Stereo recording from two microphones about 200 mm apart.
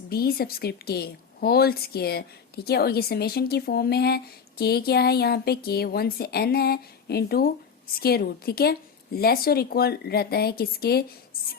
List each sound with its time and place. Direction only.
0.1 s a woman's voice: 50° left (ahead or behind)